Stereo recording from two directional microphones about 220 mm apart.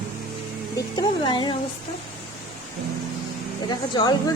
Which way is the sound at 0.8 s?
20° left (ahead or behind).